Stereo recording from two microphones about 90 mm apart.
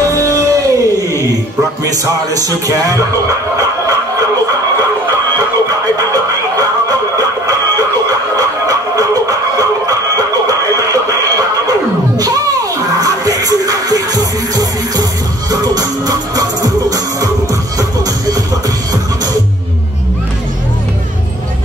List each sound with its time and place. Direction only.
0.0 s music: 40° right (ahead or behind)
6.6 s music: 45° right (ahead or behind)
12.2 s music: 45° right (ahead or behind)